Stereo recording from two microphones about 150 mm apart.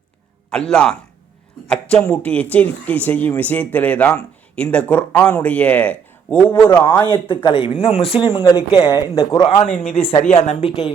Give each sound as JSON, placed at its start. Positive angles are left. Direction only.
{"t": 0.5, "sound": "a man's voice", "side_deg": 5}
{"t": 1.6, "sound": "a sound", "side_deg": 5}
{"t": 2.0, "sound": "speech", "side_deg": 10}
{"t": 7.1, "sound": "speech", "side_deg": 30}
{"t": 9.8, "sound": "a woman's voice", "side_deg": 40}